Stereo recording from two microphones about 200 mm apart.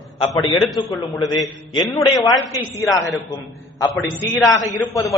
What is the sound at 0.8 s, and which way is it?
A man's voice, 15° left (ahead or behind).